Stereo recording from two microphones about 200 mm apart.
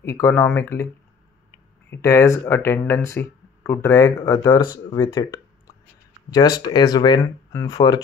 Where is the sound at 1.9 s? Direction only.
15° left (ahead or behind).